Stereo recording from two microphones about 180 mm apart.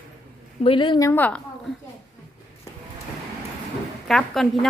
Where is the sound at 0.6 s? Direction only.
30° left (ahead or behind); by 1.4 s 10° left (ahead or behind).